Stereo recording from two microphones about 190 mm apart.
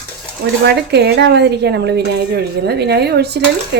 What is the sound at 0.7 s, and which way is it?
A woman's voice, 60° right (ahead or behind).